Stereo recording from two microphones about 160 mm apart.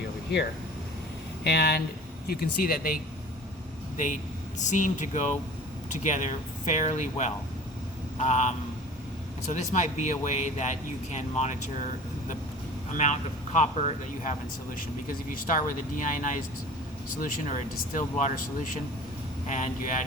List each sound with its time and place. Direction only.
1.5 s speech: 85° left
2.2 s speech: 70° left (ahead or behind)
3.9 s speech: 50° left (ahead or behind)
12.9 s speech: 50° left (ahead or behind)